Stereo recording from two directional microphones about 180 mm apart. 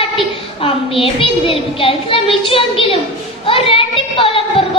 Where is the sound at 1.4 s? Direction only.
30° left (ahead or behind).